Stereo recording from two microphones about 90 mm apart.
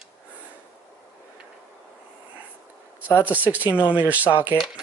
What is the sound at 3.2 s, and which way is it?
Speech, 20° right (ahead or behind).